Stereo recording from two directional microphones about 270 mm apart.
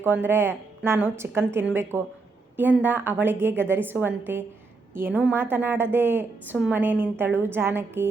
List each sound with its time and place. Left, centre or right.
0.0 s a woman's voice: centre